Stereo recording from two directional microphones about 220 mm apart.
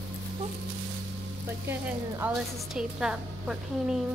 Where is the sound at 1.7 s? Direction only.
10° right (ahead or behind).